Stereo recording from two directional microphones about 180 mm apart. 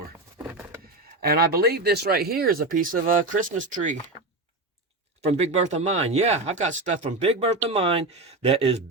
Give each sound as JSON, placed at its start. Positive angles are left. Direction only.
{"t": 0.4, "sound": "a sound", "side_deg": -10}
{"t": 1.2, "sound": "speech", "side_deg": -60}
{"t": 5.2, "sound": "speech", "side_deg": -35}